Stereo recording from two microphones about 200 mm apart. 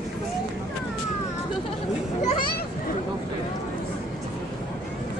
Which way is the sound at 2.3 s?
45° left (ahead or behind).